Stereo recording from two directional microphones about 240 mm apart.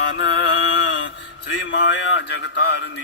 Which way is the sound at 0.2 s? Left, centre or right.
Left.